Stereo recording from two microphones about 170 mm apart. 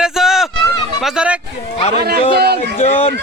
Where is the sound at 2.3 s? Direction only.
70° right (ahead or behind).